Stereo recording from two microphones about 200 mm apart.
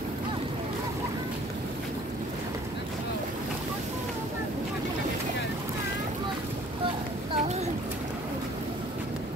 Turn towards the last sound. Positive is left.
turn(degrees=-35)  # may be behind; listen again after turning